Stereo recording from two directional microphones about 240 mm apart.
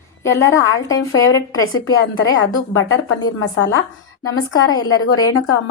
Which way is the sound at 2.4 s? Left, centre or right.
Left.